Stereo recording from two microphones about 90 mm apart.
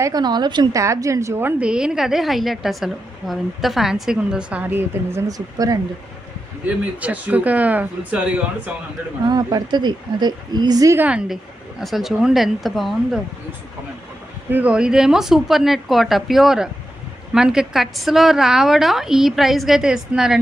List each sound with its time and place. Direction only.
0.0 s speech: 45° right (ahead or behind)
0.7 s a woman's voice: 35° right (ahead or behind)
1.6 s a woman's voice: 10° right (ahead or behind)
5.3 s a woman's voice: 40° right (ahead or behind)
7.0 s speech: 15° right (ahead or behind)
9.3 s speech: 45° right (ahead or behind)
10.9 s speech: 15° right (ahead or behind)
11.8 s a woman's voice: centre (ahead or behind)
14.5 s a woman's voice: 15° right (ahead or behind)